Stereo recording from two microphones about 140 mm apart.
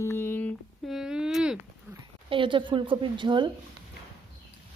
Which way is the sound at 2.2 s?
35° right (ahead or behind).